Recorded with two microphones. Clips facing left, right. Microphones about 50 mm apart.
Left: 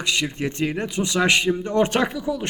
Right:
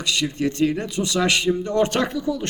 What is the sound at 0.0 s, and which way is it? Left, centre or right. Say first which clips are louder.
Speech: right 1 dB; left.